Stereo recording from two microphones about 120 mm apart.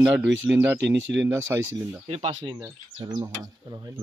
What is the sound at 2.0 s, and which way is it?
Speech, 60° right (ahead or behind).